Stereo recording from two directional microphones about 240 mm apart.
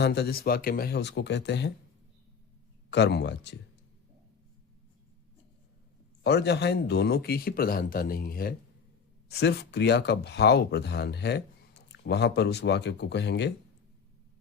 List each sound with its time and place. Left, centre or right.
0.0 s speech: left
2.9 s speech: left
6.2 s speech: left